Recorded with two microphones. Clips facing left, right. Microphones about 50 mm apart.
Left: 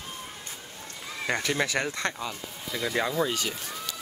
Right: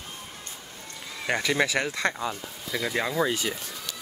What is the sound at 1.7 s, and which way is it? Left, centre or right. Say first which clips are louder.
Speech: right 2 dB; centre.